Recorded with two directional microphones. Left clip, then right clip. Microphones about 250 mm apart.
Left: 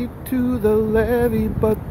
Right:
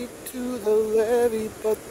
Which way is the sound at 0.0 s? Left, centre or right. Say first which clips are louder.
Left 9 dB; centre.